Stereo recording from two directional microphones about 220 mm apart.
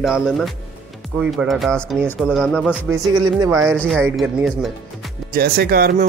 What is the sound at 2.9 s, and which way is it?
Speech, 15° right (ahead or behind).